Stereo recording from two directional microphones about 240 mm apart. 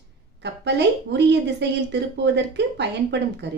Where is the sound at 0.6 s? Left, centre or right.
Right.